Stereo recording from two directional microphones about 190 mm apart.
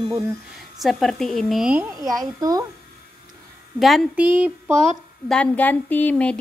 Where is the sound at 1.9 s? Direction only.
20° right (ahead or behind).